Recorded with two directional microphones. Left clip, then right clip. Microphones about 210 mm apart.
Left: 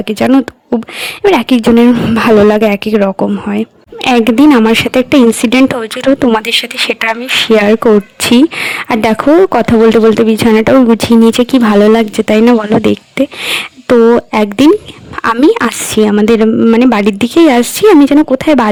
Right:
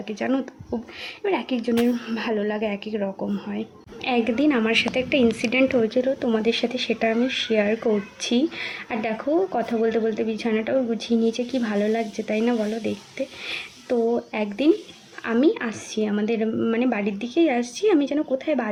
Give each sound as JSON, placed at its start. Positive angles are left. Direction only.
{"t": 0.1, "sound": "speech", "side_deg": 50}